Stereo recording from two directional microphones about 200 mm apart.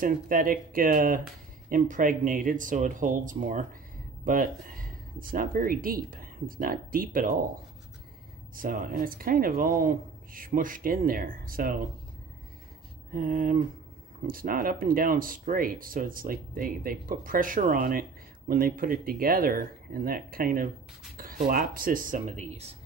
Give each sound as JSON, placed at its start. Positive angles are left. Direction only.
{"t": 0.0, "sound": "speech", "side_deg": -45}
{"t": 8.5, "sound": "speech", "side_deg": -45}
{"t": 13.1, "sound": "speech", "side_deg": -45}